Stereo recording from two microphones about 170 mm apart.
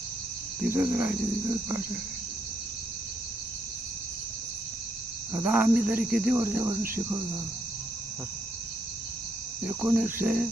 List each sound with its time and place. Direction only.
0.7 s cricket: 10° right (ahead or behind)
5.3 s cricket: 10° right (ahead or behind)
9.6 s cricket: 5° right (ahead or behind)